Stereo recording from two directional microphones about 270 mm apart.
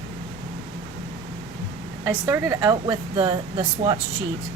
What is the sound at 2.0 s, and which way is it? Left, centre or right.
A woman's voice, centre.